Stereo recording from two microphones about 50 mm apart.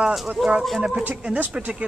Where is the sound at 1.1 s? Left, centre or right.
Right.